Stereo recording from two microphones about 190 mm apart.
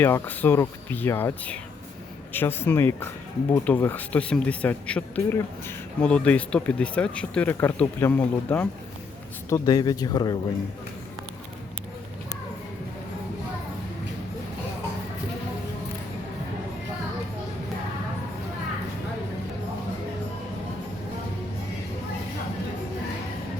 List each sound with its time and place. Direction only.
0.0 s speech: 10° left (ahead or behind)
9.5 s speech: 20° left (ahead or behind)